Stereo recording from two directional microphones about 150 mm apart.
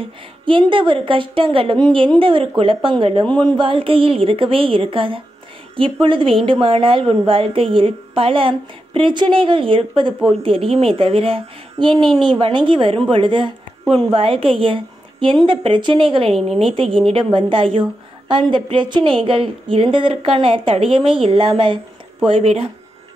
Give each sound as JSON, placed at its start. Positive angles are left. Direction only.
{"t": 0.5, "sound": "a woman's voice", "side_deg": -35}